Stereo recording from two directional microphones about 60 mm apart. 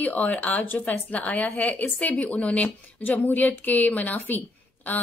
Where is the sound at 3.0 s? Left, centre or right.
Left.